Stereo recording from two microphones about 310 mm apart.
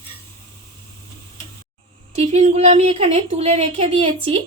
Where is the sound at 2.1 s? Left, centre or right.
Centre.